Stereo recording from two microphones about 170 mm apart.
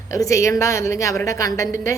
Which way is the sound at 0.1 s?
20° left (ahead or behind).